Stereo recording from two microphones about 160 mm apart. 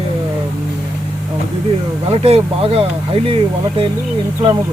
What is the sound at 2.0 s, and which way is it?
Speech, 40° right (ahead or behind).